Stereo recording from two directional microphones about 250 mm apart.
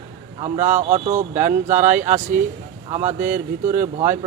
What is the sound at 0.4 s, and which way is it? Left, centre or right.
Speech, right.